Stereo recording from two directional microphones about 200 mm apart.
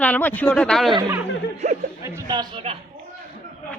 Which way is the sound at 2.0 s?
15° right (ahead or behind).